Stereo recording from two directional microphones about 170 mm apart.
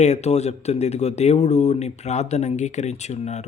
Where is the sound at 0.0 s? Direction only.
40° left (ahead or behind).